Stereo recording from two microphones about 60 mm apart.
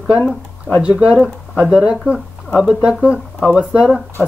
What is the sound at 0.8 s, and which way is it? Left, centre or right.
Speech, centre.